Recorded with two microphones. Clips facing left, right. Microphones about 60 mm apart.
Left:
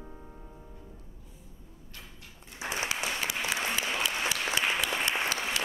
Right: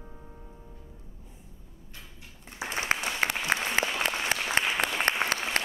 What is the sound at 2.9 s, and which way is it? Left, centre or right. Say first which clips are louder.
Applause: right 4 dB; right.